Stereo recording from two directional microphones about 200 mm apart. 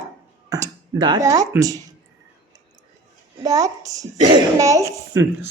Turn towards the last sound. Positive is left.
turn(degrees=-15)  # may be behind; listen again after turning